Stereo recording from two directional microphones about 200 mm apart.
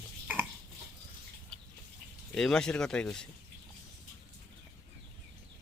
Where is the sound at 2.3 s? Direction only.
5° left (ahead or behind).